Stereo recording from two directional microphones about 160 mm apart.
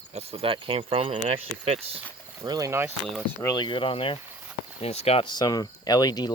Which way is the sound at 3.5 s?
30° left (ahead or behind).